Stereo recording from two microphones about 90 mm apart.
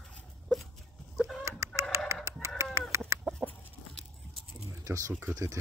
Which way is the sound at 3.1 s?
30° right (ahead or behind).